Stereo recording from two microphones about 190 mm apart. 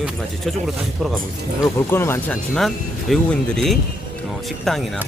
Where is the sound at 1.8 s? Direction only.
10° left (ahead or behind).